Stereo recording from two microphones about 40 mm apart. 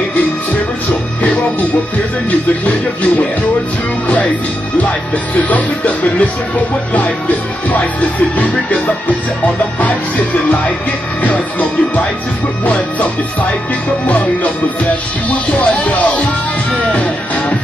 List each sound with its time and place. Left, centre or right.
1.2 s music: left
5.5 s music: left
14.0 s music: left
15.6 s music: left